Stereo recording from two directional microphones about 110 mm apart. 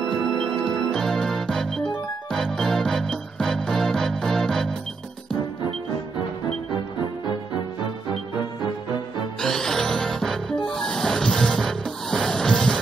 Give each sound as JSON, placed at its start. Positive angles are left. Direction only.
{"t": 0.0, "sound": "organ", "side_deg": -35}
{"t": 0.6, "sound": "organ", "side_deg": 5}
{"t": 2.3, "sound": "music", "side_deg": 5}
{"t": 9.4, "sound": "music", "side_deg": 5}